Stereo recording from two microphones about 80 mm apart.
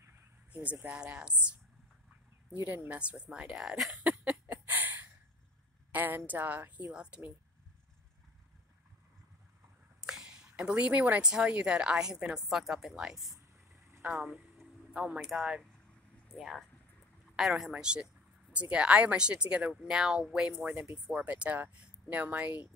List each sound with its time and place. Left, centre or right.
0.5 s speech: centre
2.6 s speech: centre
3.9 s a sound: centre
5.9 s a woman's voice: right
6.9 s speech: centre
9.9 s speech: centre
14.0 s a woman's voice: centre